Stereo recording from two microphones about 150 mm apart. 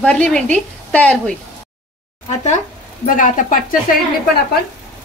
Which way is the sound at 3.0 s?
60° left (ahead or behind).